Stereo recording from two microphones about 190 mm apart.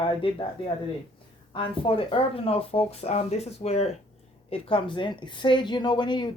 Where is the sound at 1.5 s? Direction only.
30° left (ahead or behind).